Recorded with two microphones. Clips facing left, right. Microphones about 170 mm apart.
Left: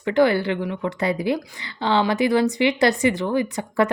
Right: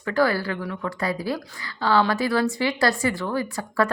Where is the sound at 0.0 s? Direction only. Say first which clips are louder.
Left 4 dB; 20° left (ahead or behind).